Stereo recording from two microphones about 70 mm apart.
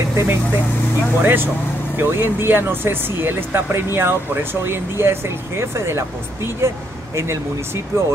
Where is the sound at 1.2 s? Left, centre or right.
Right.